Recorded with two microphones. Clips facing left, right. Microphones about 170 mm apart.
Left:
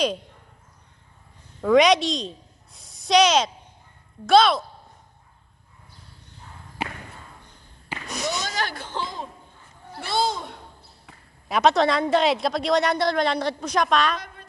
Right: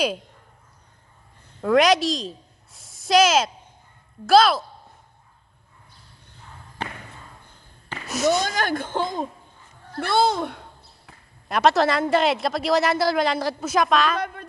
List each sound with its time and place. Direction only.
1.6 s a woman's voice: centre (ahead or behind)
8.2 s speech: 45° right (ahead or behind)
11.1 s a woman's voice: centre (ahead or behind)